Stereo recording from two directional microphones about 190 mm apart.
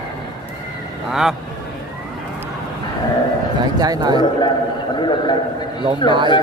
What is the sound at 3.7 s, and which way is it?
Speech, 20° right (ahead or behind).